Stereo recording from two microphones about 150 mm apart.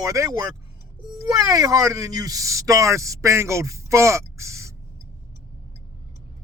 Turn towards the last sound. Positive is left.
turn(degrees=-20)  # may be behind; listen again after turning